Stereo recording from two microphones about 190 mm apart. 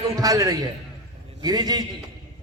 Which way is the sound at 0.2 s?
20° right (ahead or behind).